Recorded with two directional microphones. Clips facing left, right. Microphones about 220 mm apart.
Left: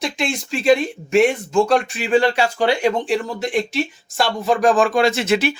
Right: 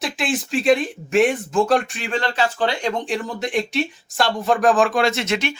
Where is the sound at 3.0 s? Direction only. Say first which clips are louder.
Left 3 dB; centre (ahead or behind).